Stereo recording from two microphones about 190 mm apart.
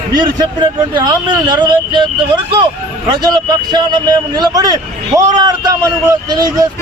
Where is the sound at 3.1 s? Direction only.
20° right (ahead or behind).